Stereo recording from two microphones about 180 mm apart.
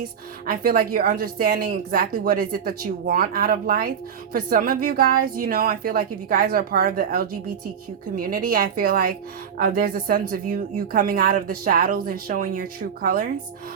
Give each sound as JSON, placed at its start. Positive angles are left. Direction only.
{"t": 0.4, "sound": "a woman's voice", "side_deg": -50}